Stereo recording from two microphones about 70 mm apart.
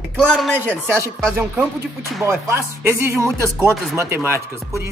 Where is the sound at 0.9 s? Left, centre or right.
Right.